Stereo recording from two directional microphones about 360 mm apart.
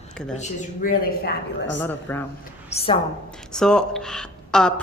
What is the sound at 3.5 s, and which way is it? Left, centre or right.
Speech, centre.